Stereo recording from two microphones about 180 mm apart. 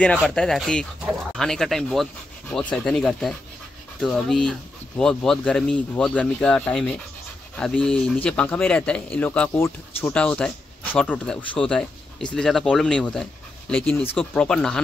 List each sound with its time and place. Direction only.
0.0 s speech: 5° left (ahead or behind)